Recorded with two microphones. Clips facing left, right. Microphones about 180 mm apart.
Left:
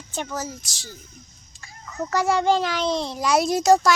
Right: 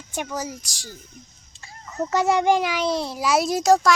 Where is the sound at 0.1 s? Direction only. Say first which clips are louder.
Right 1 dB; 10° right (ahead or behind).